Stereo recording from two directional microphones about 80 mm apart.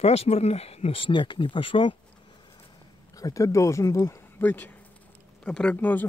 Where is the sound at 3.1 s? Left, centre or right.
Left.